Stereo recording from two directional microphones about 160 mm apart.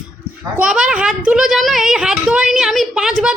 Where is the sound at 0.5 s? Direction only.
5° right (ahead or behind).